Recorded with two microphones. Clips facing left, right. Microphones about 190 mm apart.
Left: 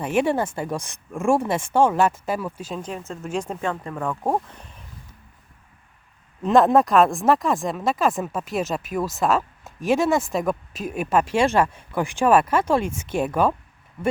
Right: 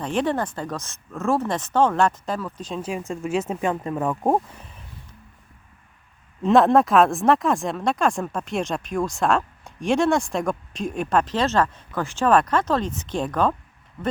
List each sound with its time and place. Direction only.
0.0 s speech: 10° left (ahead or behind)
2.8 s speech: 10° right (ahead or behind)
3.7 s speech: 20° right (ahead or behind)
4.5 s speech: centre (ahead or behind)
6.4 s speech: centre (ahead or behind)